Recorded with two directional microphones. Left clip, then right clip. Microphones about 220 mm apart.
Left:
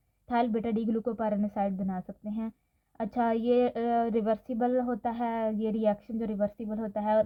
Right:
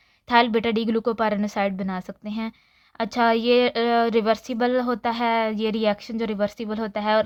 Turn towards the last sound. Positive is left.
turn(degrees=-20)  # may be behind; listen again after turning